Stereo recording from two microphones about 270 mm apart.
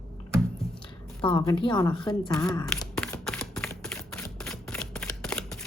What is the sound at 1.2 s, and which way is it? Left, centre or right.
Speech, centre.